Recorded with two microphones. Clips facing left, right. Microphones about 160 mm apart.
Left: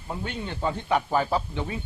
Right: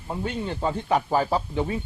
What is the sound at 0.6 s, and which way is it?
Speech, 35° right (ahead or behind).